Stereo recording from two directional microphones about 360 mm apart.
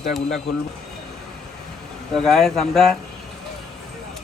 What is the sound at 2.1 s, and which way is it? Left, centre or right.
Speech, centre.